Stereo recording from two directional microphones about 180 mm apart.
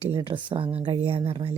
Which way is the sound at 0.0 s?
30° right (ahead or behind).